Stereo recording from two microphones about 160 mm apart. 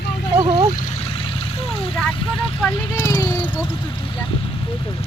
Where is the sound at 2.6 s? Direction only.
15° left (ahead or behind).